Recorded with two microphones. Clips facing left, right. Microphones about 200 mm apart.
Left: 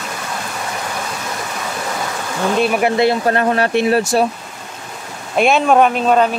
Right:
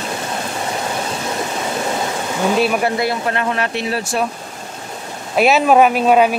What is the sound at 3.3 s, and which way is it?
Speech, 40° left (ahead or behind).